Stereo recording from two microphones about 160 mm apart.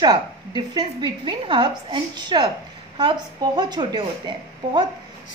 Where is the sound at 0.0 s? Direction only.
25° right (ahead or behind).